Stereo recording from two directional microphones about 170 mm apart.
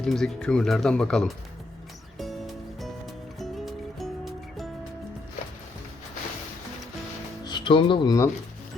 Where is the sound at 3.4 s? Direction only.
Centre (ahead or behind).